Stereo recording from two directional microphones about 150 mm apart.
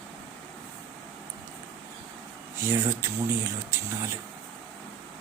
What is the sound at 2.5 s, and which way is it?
Speech, 15° right (ahead or behind).